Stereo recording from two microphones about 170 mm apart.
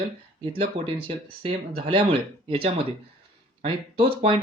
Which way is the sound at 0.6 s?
35° right (ahead or behind).